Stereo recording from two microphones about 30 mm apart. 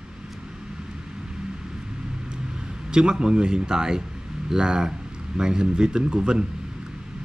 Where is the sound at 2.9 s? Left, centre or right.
Right.